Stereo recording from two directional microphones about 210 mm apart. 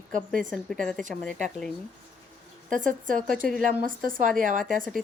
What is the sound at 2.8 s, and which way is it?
Speech, 40° right (ahead or behind).